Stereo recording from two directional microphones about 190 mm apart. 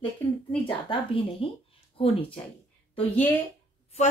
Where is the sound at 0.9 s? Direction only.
30° left (ahead or behind).